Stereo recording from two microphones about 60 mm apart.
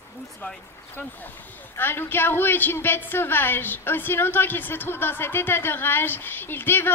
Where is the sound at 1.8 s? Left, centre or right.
Left.